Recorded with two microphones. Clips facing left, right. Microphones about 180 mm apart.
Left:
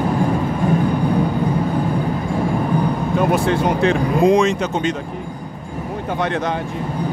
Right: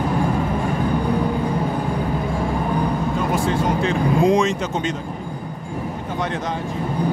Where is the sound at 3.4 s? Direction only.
65° left (ahead or behind).